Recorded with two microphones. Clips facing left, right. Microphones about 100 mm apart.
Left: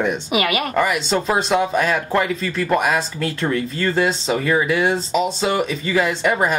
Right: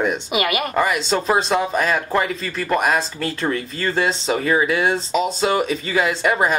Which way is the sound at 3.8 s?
35° right (ahead or behind).